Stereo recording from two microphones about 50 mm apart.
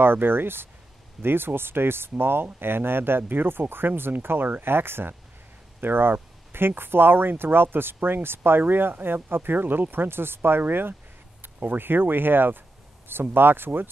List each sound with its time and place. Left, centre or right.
0.0 s speech: right